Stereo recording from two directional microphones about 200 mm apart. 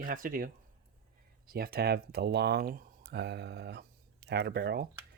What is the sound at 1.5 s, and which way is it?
Speech, 50° right (ahead or behind).